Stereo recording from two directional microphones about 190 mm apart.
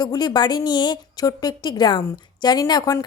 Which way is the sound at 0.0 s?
20° left (ahead or behind).